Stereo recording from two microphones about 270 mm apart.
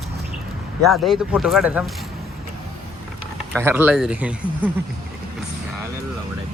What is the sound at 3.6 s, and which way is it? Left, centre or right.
Speech, centre.